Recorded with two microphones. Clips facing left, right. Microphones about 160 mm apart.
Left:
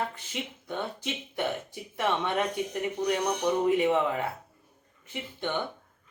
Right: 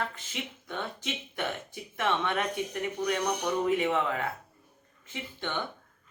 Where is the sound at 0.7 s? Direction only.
15° left (ahead or behind).